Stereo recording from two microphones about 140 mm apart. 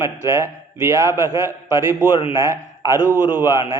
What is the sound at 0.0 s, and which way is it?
A man's voice, 20° right (ahead or behind).